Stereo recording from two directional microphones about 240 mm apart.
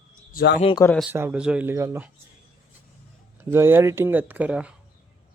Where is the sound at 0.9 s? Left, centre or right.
Centre.